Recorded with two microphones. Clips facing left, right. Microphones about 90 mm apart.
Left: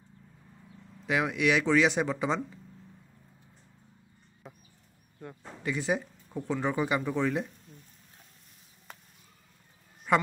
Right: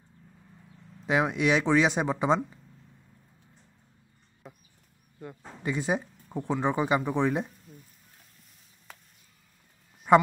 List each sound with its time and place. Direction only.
1.0 s speech: 25° right (ahead or behind)
4.4 s a sound: centre (ahead or behind)
5.2 s speech: 5° right (ahead or behind)
5.6 s speech: 20° right (ahead or behind)
7.7 s speech: 10° right (ahead or behind)
10.1 s a woman's voice: 20° right (ahead or behind)